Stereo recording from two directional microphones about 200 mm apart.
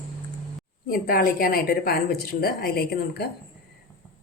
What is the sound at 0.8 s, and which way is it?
A woman's voice, 45° left (ahead or behind).